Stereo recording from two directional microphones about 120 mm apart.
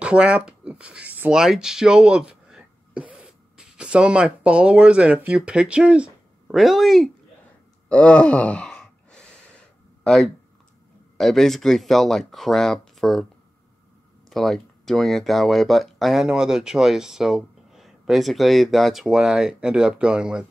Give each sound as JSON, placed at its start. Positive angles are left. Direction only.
{"t": 0.0, "sound": "speech", "side_deg": -10}
{"t": 7.9, "sound": "gasp", "side_deg": 10}
{"t": 10.0, "sound": "speech", "side_deg": 5}
{"t": 14.3, "sound": "speech", "side_deg": 0}